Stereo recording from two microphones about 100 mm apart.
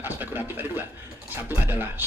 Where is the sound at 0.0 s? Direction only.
20° right (ahead or behind).